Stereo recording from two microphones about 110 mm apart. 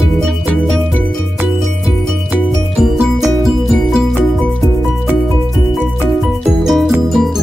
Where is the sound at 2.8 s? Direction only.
Centre (ahead or behind).